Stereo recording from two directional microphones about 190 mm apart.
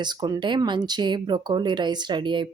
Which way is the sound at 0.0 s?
20° right (ahead or behind).